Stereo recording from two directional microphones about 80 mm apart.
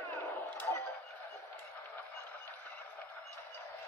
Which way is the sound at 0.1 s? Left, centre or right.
Left.